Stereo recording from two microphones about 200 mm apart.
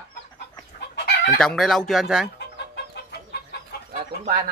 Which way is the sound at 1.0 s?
55° left (ahead or behind).